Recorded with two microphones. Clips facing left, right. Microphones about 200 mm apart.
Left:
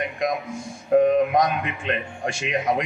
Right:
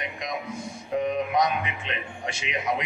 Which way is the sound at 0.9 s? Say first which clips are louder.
Left 7 dB; 50° left (ahead or behind).